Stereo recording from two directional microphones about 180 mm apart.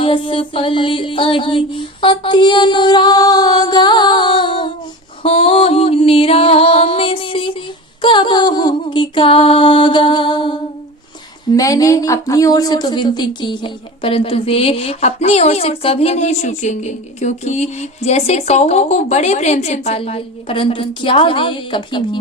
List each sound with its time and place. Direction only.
0.0 s music: 30° left (ahead or behind)
5.2 s speech: 30° left (ahead or behind)
8.0 s music: 25° left (ahead or behind)
11.5 s speech: 20° left (ahead or behind)